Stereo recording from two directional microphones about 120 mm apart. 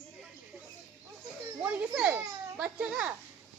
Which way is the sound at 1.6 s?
15° right (ahead or behind).